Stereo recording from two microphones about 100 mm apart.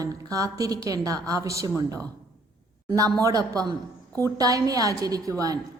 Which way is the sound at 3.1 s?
40° right (ahead or behind).